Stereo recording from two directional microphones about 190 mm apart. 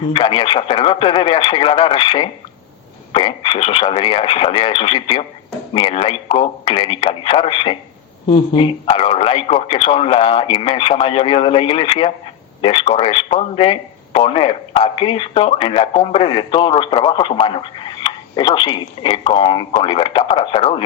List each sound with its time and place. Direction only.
0.1 s speech: 25° left (ahead or behind)